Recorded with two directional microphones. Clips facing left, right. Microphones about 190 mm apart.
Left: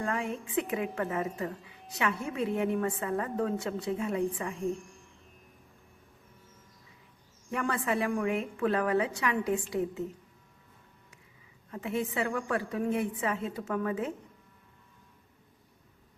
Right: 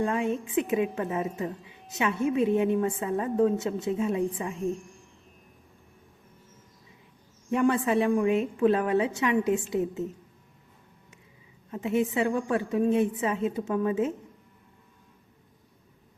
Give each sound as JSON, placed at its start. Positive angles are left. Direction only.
{"t": 0.0, "sound": "a woman's voice", "side_deg": -20}
{"t": 7.5, "sound": "a woman's voice", "side_deg": -25}
{"t": 11.7, "sound": "a woman's voice", "side_deg": -20}